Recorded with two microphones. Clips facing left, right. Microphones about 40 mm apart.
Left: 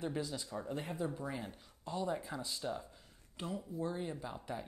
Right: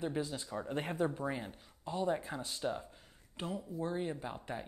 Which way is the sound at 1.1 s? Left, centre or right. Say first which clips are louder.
Right 3 dB; right.